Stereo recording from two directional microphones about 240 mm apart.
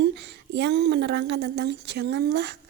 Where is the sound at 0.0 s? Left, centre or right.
Right.